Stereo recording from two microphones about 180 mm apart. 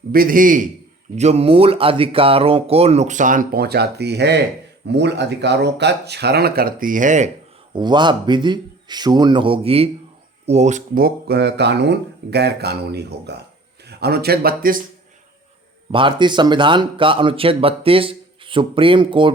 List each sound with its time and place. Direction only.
0.1 s a man's voice: 50° right (ahead or behind)
1.1 s speech: 40° right (ahead or behind)
7.7 s speech: 25° right (ahead or behind); by 14.8 s 55° right (ahead or behind)
15.9 s speech: 30° right (ahead or behind)